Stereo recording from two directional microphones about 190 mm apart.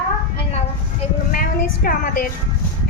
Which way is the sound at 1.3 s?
50° left (ahead or behind).